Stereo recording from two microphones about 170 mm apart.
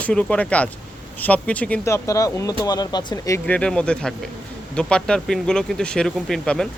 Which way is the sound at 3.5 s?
5° left (ahead or behind).